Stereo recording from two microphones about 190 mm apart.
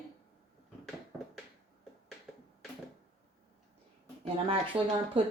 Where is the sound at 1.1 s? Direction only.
10° right (ahead or behind).